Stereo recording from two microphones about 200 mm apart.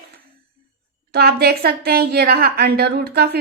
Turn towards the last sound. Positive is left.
turn(degrees=-55)  # may be behind; listen again after turning